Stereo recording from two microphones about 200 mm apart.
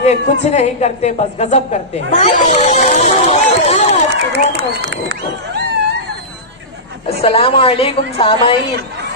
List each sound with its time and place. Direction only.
0.0 s a woman's voice: 35° left (ahead or behind)
4.1 s speech: 55° right (ahead or behind)
7.1 s a woman's voice: 30° left (ahead or behind)